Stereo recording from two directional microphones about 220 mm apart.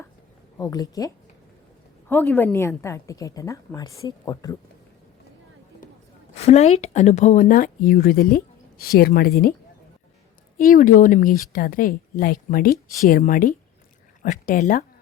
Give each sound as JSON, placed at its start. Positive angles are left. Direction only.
{"t": 0.6, "sound": "a woman's voice", "side_deg": 15}
{"t": 6.3, "sound": "a woman's voice", "side_deg": 30}
{"t": 10.6, "sound": "speech", "side_deg": 40}